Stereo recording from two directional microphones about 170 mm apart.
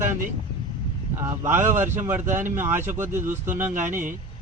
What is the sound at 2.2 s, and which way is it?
Speech, 50° right (ahead or behind).